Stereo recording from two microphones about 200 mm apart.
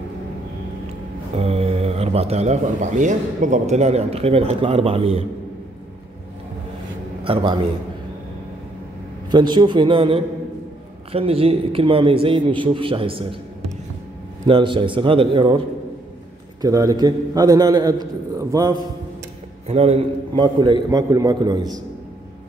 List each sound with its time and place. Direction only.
1.3 s a man's voice: 30° right (ahead or behind)
9.3 s a man's voice: 20° right (ahead or behind)
14.5 s a man's voice: 25° right (ahead or behind)
16.6 s a man's voice: 15° right (ahead or behind)
19.7 s a man's voice: 30° right (ahead or behind)